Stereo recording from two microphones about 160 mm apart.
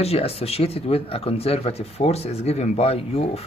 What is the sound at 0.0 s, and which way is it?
Speech, 40° left (ahead or behind).